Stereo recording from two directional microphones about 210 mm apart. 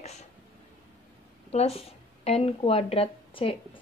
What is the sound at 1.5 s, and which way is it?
A woman's voice, 30° left (ahead or behind).